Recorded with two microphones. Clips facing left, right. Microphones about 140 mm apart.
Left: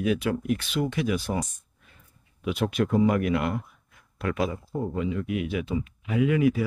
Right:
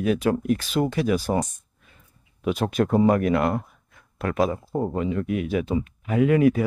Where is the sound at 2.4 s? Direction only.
40° right (ahead or behind).